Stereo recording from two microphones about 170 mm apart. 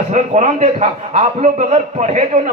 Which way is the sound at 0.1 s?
45° right (ahead or behind).